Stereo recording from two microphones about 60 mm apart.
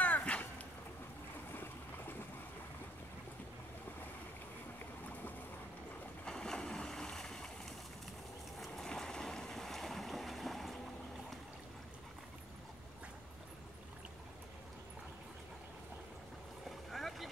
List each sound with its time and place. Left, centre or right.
0.0 s a sound: left
1.5 s boat: left
6.2 s boat: centre
8.5 s boat: centre
16.9 s boat: centre